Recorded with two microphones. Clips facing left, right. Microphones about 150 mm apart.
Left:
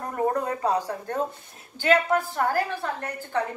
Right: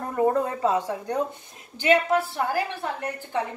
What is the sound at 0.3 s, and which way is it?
Speech, 25° right (ahead or behind).